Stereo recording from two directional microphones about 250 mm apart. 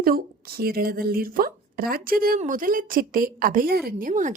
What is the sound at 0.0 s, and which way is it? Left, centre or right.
A woman's voice, right.